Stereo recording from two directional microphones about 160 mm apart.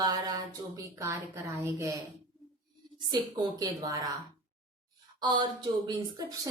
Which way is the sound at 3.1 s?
25° right (ahead or behind).